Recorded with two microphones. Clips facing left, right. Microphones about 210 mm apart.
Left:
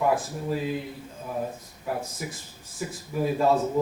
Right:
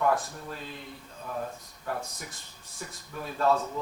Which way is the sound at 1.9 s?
5° left (ahead or behind).